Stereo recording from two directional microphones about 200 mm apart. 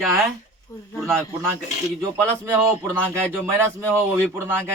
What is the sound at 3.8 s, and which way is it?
Speech, 5° left (ahead or behind).